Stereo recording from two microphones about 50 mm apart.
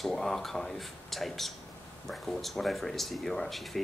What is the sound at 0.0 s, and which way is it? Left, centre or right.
Speech, centre.